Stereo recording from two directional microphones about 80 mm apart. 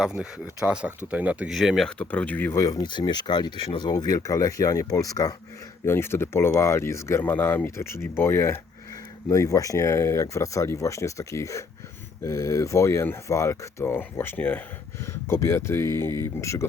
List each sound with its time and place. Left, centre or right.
0.0 s speech: centre
1.5 s speech: centre
2.0 s speech: centre
2.5 s speech: left
2.8 s speech: left
5.8 s speech: left
9.3 s speech: left; by 14.6 s centre
15.0 s speech: left